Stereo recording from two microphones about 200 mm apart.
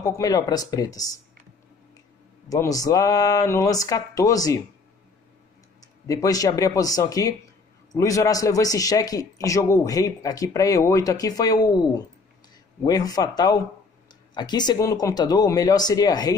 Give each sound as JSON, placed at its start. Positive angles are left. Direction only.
{"t": 0.0, "sound": "a man's voice", "side_deg": 15}
{"t": 2.5, "sound": "a man's voice", "side_deg": 15}
{"t": 6.0, "sound": "a man's voice", "side_deg": 15}